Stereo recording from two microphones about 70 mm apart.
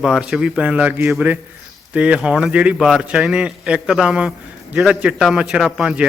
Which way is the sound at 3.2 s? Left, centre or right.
Centre.